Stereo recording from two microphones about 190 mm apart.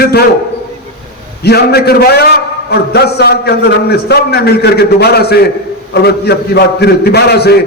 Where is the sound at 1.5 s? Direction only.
55° left (ahead or behind).